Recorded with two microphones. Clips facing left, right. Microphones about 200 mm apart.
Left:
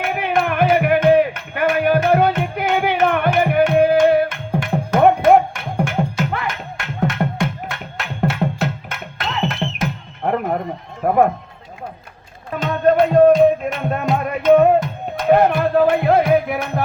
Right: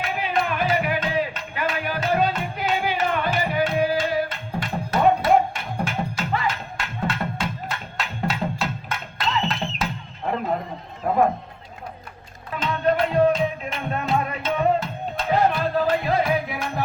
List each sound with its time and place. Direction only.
0.0 s music: 60° left (ahead or behind)
11.0 s run: 60° left (ahead or behind)
12.5 s music: 50° left (ahead or behind)